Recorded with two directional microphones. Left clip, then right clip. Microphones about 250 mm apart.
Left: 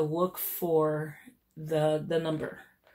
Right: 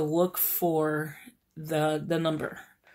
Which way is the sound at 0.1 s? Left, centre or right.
Right.